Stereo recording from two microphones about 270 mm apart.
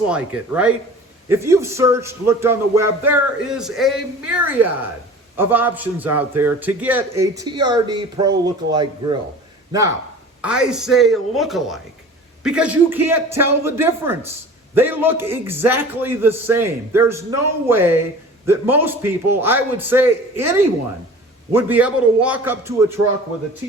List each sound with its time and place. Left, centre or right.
0.1 s speech: centre
10.4 s speech: centre